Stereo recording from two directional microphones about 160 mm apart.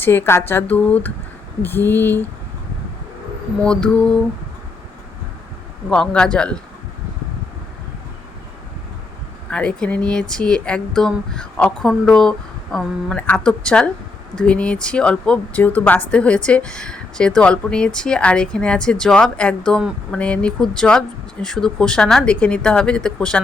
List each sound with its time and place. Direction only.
0.0 s a woman's voice: 15° left (ahead or behind)
3.6 s speech: 5° left (ahead or behind)
5.9 s speech: 5° left (ahead or behind)
9.5 s speech: 5° left (ahead or behind)